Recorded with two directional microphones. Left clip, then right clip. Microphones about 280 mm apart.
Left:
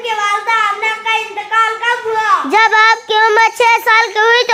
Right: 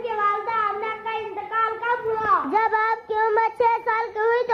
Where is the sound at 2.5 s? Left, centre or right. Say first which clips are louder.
Left 12 dB; left.